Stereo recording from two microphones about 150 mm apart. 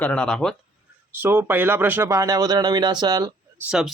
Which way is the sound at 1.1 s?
15° right (ahead or behind).